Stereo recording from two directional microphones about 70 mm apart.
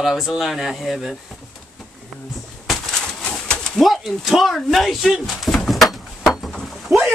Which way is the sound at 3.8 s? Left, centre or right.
Centre.